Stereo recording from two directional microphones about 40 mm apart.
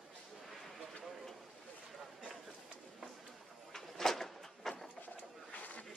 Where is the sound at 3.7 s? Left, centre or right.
Centre.